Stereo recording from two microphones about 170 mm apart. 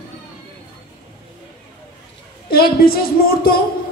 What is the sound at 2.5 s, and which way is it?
Speech, 60° left (ahead or behind).